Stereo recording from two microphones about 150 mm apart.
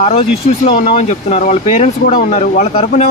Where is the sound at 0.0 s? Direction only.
45° left (ahead or behind).